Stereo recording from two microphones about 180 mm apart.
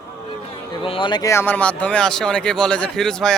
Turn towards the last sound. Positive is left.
turn(degrees=5)  # may be behind; listen again after turning